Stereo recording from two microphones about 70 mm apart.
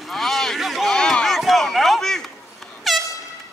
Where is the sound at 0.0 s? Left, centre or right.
Centre.